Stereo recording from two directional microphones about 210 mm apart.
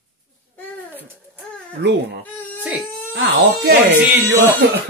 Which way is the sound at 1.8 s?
55° right (ahead or behind).